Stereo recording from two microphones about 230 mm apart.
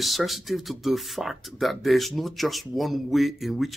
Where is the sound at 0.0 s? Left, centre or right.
Centre.